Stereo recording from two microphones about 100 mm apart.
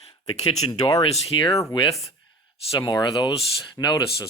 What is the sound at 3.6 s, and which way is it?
Speech, 45° left (ahead or behind).